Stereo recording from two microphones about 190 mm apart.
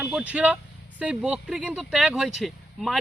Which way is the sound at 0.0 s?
5° right (ahead or behind).